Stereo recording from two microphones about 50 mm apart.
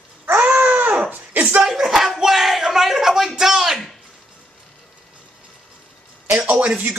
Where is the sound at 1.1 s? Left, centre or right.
Right.